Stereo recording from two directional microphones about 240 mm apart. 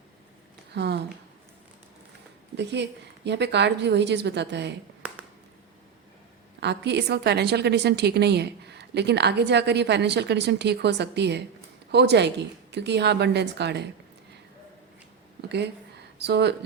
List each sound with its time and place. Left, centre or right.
0.7 s speech: right
2.6 s a woman's voice: right
6.6 s a woman's voice: right
15.4 s a woman's voice: right